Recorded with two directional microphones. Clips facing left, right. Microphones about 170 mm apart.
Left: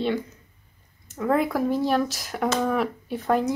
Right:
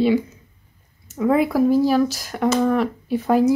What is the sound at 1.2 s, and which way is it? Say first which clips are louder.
A woman's voice: right 5 dB; 5° right (ahead or behind).